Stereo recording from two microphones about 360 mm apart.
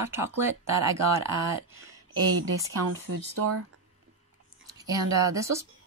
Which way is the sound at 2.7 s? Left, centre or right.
Right.